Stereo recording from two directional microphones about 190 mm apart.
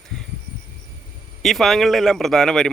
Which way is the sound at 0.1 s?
Centre (ahead or behind).